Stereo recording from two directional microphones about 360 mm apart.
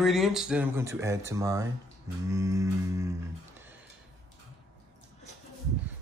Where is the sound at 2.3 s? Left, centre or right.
Centre.